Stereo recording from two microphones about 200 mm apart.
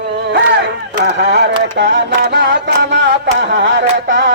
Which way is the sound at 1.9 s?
55° right (ahead or behind).